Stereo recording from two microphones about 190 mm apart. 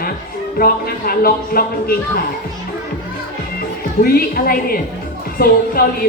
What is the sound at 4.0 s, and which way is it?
Speech, 55° left (ahead or behind).